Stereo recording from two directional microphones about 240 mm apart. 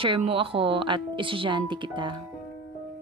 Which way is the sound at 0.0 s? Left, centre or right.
Right.